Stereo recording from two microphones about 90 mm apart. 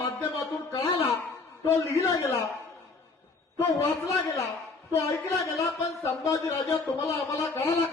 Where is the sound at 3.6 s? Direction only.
35° left (ahead or behind).